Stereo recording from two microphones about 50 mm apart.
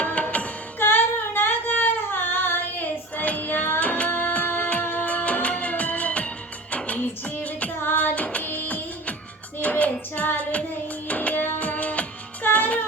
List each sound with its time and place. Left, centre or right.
0.0 s carnatic music: left
0.8 s female singing: left
3.8 s music of bollywood: left
7.9 s music: left
8.4 s printer: left
9.6 s music: left